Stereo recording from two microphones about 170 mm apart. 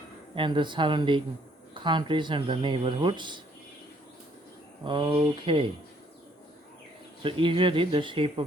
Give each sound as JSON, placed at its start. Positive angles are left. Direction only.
{"t": 0.3, "sound": "speech", "side_deg": -30}
{"t": 4.9, "sound": "speech", "side_deg": -30}
{"t": 7.2, "sound": "speech", "side_deg": -30}